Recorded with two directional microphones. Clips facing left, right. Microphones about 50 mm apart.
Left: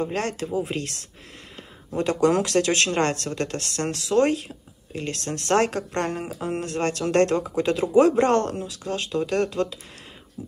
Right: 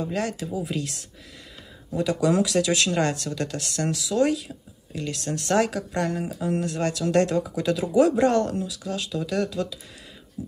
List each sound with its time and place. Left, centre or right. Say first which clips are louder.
0.0 s speech: left 1 dB; left